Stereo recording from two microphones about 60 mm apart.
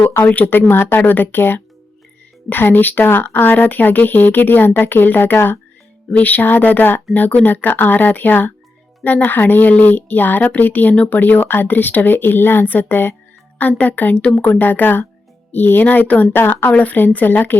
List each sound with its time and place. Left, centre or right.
0.3 s speech: left
0.9 s speech: left